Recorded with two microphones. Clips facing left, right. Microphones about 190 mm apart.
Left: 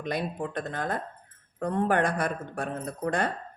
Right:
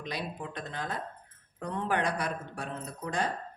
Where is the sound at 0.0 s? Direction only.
50° left (ahead or behind).